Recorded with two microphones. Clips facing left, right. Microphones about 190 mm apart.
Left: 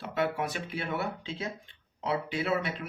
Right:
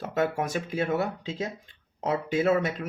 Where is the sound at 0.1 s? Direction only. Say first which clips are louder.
Right 3 dB; 45° right (ahead or behind).